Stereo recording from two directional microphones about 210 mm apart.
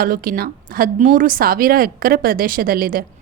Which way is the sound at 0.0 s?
45° right (ahead or behind).